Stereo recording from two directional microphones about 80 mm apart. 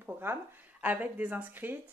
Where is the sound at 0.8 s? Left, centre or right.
Centre.